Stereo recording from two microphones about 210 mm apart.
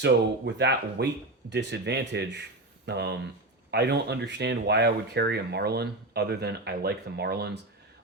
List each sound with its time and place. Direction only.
0.0 s speech: 55° right (ahead or behind)